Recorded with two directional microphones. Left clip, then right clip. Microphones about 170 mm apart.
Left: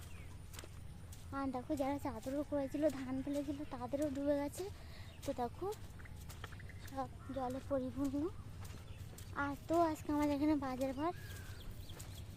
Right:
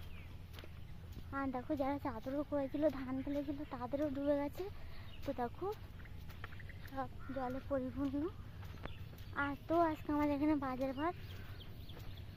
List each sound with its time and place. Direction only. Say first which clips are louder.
1.3 s speech: right 1 dB; 10° right (ahead or behind)
3.3 s speech: even; 10° right (ahead or behind)
6.9 s speech: even; 5° right (ahead or behind)
9.3 s speech: right 1 dB; 15° right (ahead or behind)